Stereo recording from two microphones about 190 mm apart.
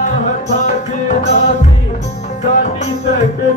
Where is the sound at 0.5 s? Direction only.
40° left (ahead or behind).